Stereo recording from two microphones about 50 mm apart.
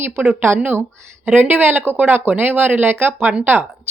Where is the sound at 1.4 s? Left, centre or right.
Right.